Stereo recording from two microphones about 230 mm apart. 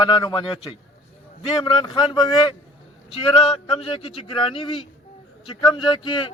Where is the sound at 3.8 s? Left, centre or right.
Left.